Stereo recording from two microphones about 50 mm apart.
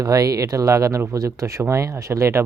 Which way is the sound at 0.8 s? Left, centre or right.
Right.